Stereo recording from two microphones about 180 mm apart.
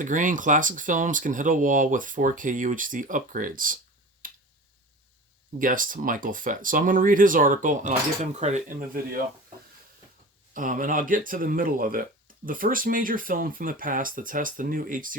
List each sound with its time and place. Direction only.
0.0 s speech: 45° right (ahead or behind)
4.2 s finger snapping: 50° right (ahead or behind)
5.5 s speech: 50° right (ahead or behind)
10.5 s speech: 45° right (ahead or behind)